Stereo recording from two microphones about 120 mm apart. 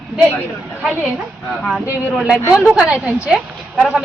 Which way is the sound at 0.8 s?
5° right (ahead or behind).